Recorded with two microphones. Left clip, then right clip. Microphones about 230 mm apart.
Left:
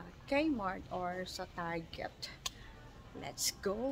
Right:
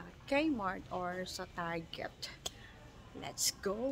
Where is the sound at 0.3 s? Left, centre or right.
Centre.